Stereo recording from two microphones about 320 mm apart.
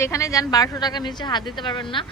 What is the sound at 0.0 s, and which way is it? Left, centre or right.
A woman's voice, centre.